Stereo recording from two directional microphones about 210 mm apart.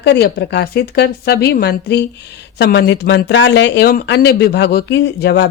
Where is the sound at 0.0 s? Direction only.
50° left (ahead or behind).